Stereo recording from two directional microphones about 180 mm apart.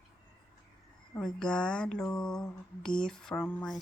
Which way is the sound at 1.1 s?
5° left (ahead or behind).